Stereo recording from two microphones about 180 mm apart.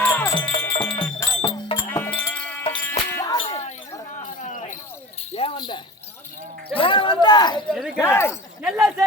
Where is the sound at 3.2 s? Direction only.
20° left (ahead or behind).